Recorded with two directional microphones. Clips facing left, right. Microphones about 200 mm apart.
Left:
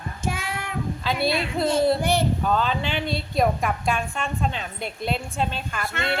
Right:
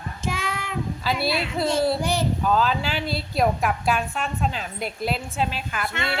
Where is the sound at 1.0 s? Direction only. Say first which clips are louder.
Left 1 dB; 5° right (ahead or behind).